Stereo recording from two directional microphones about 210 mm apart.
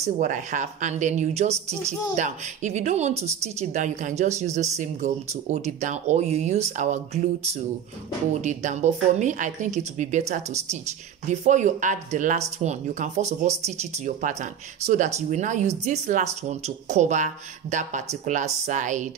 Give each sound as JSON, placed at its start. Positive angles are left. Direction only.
{"t": 0.0, "sound": "speech", "side_deg": -35}
{"t": 8.4, "sound": "speech", "side_deg": -35}